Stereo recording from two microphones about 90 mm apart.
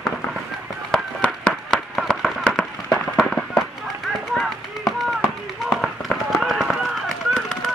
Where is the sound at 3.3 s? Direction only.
5° left (ahead or behind).